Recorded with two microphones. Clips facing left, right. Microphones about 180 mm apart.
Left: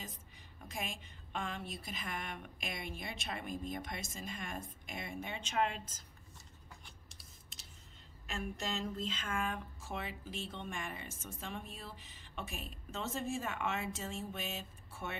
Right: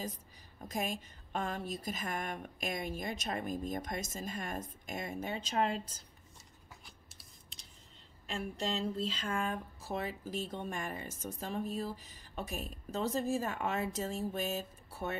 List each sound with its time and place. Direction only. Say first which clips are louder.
0.6 s a woman's voice: right 7 dB; 40° right (ahead or behind)
7.1 s scissors: even; centre (ahead or behind)
8.3 s speech: right 4 dB; 30° right (ahead or behind)